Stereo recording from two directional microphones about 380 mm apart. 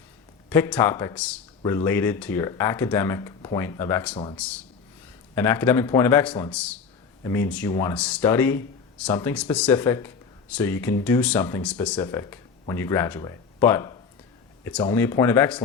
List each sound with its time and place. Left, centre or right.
0.5 s speech: centre